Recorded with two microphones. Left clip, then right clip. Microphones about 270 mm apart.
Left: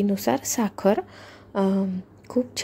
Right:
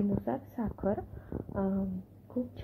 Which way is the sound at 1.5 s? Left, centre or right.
Left.